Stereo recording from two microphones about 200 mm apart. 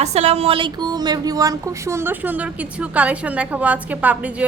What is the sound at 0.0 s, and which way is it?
Speech, 30° right (ahead or behind).